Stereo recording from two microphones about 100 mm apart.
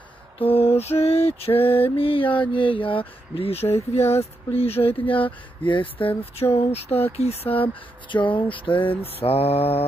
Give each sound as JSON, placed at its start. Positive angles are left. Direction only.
{"t": 0.4, "sound": "mantra", "side_deg": 75}
{"t": 4.2, "sound": "speech", "side_deg": 85}
{"t": 6.5, "sound": "speech", "side_deg": 90}